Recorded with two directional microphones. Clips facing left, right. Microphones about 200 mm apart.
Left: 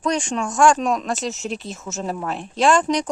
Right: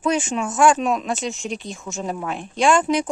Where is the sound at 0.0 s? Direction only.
5° right (ahead or behind).